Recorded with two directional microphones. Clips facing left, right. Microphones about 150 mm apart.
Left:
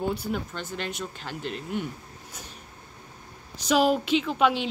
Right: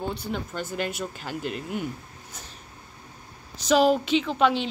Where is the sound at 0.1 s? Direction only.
10° left (ahead or behind).